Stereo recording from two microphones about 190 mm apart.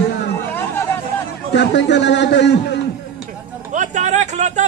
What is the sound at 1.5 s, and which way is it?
A man's voice, 65° left (ahead or behind).